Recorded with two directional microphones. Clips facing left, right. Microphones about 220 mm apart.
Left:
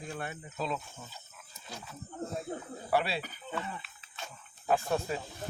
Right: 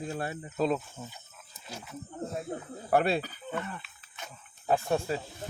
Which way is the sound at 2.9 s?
50° right (ahead or behind).